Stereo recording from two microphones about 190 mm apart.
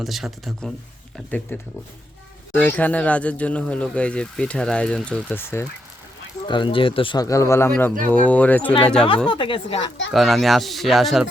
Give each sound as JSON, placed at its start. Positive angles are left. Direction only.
{"t": 0.0, "sound": "speech", "side_deg": 0}
{"t": 2.6, "sound": "speech", "side_deg": 10}
{"t": 6.5, "sound": "a man's voice", "side_deg": 25}
{"t": 9.0, "sound": "a man's voice", "side_deg": 30}
{"t": 10.1, "sound": "speech", "side_deg": 0}